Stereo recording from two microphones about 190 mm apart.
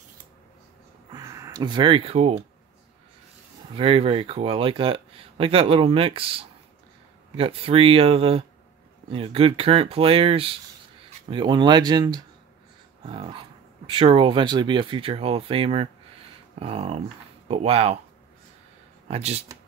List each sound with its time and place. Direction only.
1.1 s speech: 15° right (ahead or behind)
3.7 s speech: 30° right (ahead or behind)
19.0 s speech: 35° right (ahead or behind)